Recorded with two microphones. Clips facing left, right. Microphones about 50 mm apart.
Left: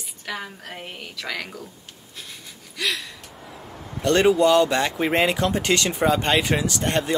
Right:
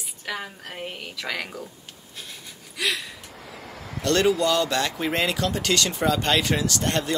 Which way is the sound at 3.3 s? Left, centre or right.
Right.